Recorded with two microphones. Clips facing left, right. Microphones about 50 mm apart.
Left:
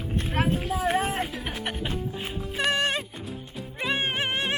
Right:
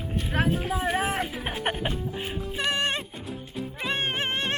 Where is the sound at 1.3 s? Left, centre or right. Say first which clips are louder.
Right 3 dB; right.